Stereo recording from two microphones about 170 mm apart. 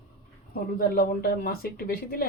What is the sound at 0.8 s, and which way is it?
Speech, 60° left (ahead or behind).